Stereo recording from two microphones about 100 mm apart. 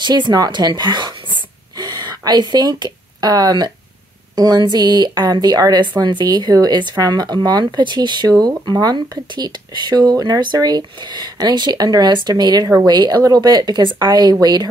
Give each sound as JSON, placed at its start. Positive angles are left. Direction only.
{"t": 0.0, "sound": "speech", "side_deg": -45}